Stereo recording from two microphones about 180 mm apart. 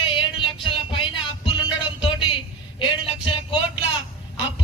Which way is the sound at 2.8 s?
30° left (ahead or behind).